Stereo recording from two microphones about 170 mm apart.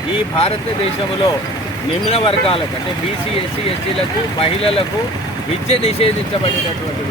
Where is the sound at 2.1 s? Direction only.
35° left (ahead or behind).